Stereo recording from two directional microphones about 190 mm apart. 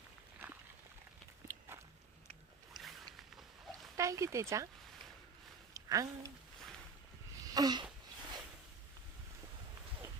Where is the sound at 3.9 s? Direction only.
15° right (ahead or behind).